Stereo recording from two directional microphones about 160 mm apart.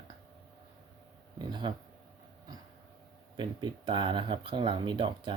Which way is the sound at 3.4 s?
30° right (ahead or behind).